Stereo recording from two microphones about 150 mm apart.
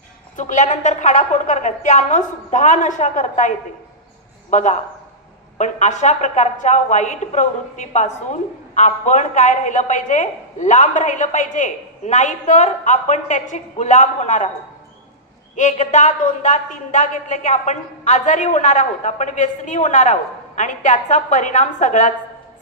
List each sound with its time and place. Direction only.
0.4 s a woman's voice: 55° left (ahead or behind)
15.5 s a woman's voice: 50° left (ahead or behind)